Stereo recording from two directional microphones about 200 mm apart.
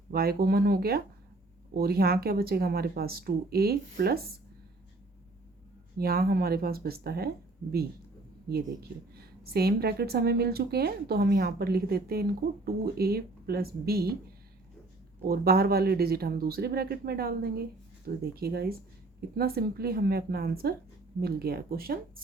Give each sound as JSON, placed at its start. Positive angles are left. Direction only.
{"t": 0.1, "sound": "a woman's voice", "side_deg": -50}
{"t": 6.0, "sound": "a woman's voice", "side_deg": -50}
{"t": 8.4, "sound": "a woman's voice", "side_deg": -50}
{"t": 15.3, "sound": "a woman's voice", "side_deg": -50}